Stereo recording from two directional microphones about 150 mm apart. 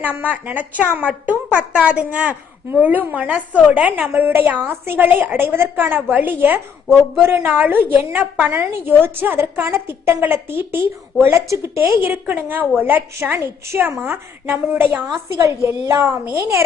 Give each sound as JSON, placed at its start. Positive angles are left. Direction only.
{"t": 0.0, "sound": "a woman's voice", "side_deg": -10}